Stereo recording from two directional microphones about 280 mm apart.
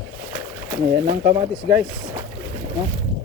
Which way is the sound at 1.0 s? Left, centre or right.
Centre.